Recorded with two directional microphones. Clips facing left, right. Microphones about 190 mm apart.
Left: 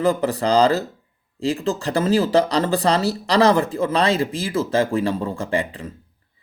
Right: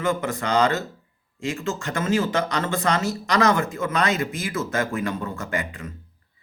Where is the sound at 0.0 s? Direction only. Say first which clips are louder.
Left 5 dB; 35° left (ahead or behind).